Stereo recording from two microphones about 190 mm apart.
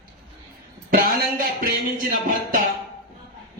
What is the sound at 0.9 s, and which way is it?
Speech, 50° right (ahead or behind).